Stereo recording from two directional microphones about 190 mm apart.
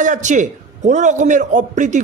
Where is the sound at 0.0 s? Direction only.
40° right (ahead or behind).